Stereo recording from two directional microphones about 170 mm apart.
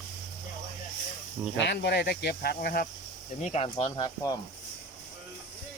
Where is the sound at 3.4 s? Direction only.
40° left (ahead or behind).